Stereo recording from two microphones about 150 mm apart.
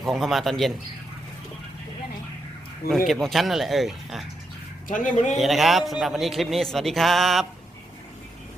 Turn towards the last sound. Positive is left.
turn(degrees=0)  # may be behind; listen again after turning